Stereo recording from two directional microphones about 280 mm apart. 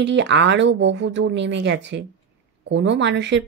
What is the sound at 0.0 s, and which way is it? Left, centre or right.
Speech, right.